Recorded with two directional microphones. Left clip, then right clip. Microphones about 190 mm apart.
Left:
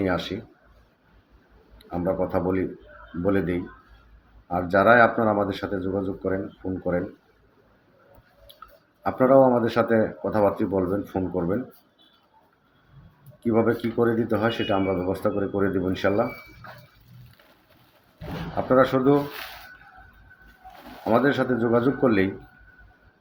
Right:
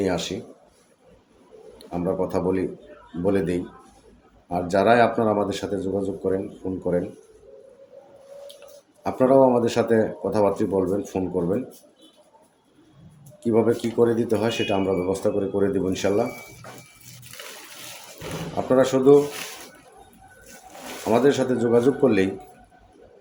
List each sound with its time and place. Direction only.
0.0 s speech: 5° right (ahead or behind)
1.8 s speech: 5° right (ahead or behind)
6.6 s speech: 15° right (ahead or behind)
9.0 s speech: 5° right (ahead or behind)
13.4 s speech: 5° right (ahead or behind)
18.7 s speech: 5° right (ahead or behind)
21.0 s speech: 5° right (ahead or behind)